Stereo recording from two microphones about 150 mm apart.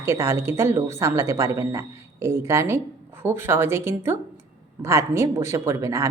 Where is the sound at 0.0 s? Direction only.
20° right (ahead or behind).